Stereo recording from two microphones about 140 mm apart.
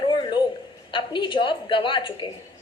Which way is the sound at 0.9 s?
35° left (ahead or behind).